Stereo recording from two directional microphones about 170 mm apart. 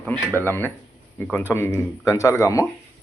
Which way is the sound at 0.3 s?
15° left (ahead or behind).